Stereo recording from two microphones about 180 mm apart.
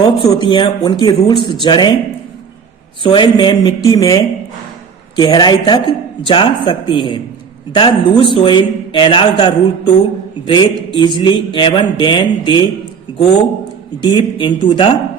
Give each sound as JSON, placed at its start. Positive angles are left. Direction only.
{"t": 0.0, "sound": "a man's voice", "side_deg": 25}
{"t": 3.0, "sound": "a man's voice", "side_deg": 25}
{"t": 14.0, "sound": "a man's voice", "side_deg": 25}